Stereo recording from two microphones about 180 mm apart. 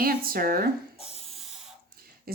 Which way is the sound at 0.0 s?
55° right (ahead or behind).